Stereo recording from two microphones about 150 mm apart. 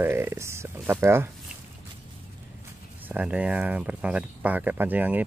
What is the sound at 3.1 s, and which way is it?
Speech, 10° right (ahead or behind).